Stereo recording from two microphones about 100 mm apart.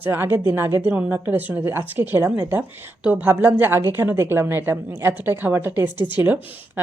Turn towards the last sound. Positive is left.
turn(degrees=-20)  # may be behind; listen again after turning